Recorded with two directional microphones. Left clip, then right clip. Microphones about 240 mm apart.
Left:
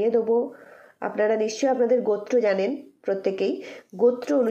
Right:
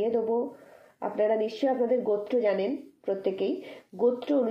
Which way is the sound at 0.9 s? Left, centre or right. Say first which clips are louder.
Left 3 dB; centre.